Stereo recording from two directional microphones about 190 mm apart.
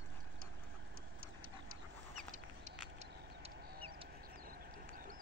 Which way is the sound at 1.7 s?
45° right (ahead or behind).